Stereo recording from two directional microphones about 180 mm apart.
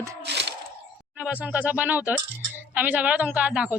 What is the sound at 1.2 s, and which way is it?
Speech, 5° right (ahead or behind).